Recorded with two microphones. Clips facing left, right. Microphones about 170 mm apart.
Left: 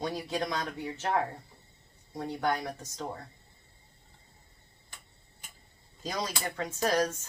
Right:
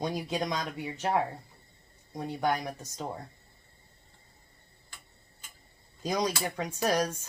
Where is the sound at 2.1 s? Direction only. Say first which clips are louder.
Right 1 dB; 15° right (ahead or behind).